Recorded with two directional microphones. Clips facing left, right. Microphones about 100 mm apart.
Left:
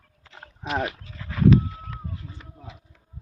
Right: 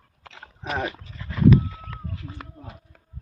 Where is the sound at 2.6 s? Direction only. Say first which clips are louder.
Right 1 dB; 50° right (ahead or behind).